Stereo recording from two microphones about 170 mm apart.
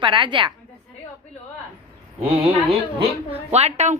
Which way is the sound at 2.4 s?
35° right (ahead or behind).